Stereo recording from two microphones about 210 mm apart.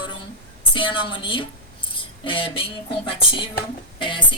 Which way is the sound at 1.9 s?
25° left (ahead or behind).